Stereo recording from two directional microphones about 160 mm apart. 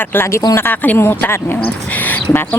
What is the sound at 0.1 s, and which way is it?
Speech, 15° left (ahead or behind).